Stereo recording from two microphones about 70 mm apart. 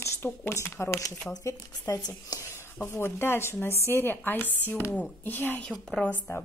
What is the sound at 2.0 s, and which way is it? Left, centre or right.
Speech, left.